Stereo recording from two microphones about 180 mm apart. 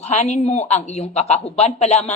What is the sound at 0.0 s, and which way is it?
A woman's voice, 40° left (ahead or behind).